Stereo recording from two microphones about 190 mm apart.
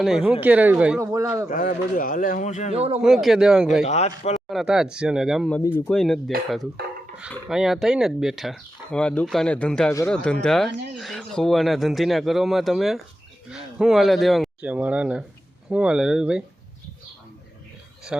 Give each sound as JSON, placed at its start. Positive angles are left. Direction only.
{"t": 0.0, "sound": "speech", "side_deg": -5}
{"t": 1.5, "sound": "speech", "side_deg": 45}
{"t": 2.7, "sound": "a man's voice", "side_deg": -30}
{"t": 3.0, "sound": "speech", "side_deg": 0}
{"t": 3.8, "sound": "speech", "side_deg": 35}
{"t": 4.4, "sound": "speech", "side_deg": 0}